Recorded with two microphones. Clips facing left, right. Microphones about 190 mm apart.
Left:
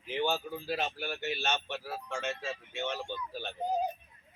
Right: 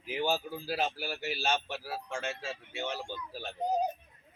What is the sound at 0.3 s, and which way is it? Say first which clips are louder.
Speech: even; 35° right (ahead or behind).